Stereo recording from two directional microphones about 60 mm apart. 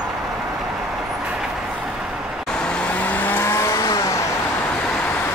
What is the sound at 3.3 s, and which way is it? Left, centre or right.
Vehicle, left.